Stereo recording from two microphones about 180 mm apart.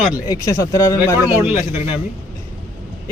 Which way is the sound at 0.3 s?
20° left (ahead or behind).